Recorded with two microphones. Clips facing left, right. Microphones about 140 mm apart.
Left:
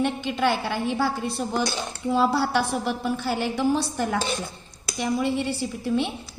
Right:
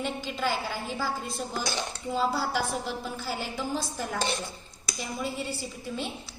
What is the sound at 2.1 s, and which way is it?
A woman's voice, 75° left (ahead or behind).